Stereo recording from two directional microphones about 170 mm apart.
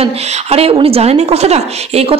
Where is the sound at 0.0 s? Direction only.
35° right (ahead or behind).